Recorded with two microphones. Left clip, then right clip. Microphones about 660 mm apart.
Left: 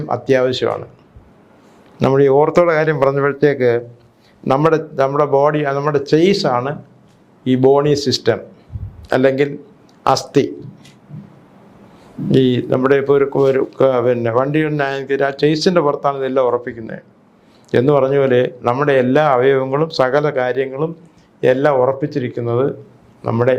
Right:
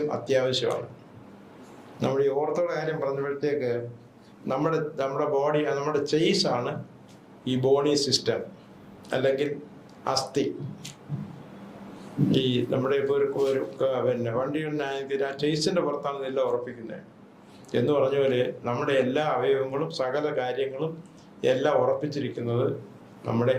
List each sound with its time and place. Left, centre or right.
0.1 s speech: left
2.0 s a man's voice: left
12.3 s speech: left